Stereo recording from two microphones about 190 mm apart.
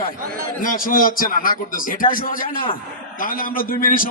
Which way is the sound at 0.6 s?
50° left (ahead or behind).